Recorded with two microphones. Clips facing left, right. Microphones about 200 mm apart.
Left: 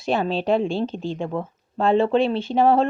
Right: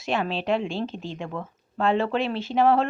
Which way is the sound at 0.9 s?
Centre (ahead or behind).